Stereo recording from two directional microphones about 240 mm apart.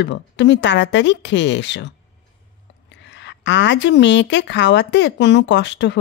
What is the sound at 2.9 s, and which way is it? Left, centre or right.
A woman's voice, left.